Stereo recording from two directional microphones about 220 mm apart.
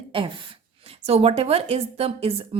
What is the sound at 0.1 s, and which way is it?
Speech, 20° right (ahead or behind).